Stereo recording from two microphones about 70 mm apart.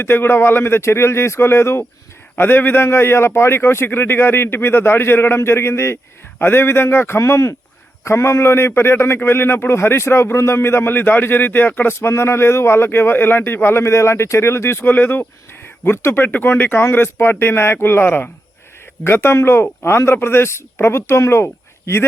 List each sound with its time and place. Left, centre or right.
0.0 s a man's voice: left